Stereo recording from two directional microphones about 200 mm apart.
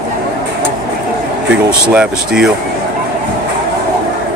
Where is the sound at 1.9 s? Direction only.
5° right (ahead or behind).